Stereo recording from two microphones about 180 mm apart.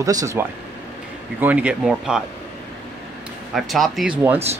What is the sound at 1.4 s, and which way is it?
Speech, 5° right (ahead or behind).